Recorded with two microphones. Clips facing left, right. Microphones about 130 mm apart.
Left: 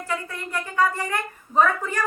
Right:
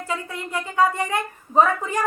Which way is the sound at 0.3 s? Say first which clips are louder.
Right 2 dB; 20° right (ahead or behind).